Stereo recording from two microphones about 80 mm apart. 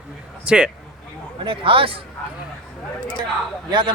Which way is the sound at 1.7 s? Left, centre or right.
Right.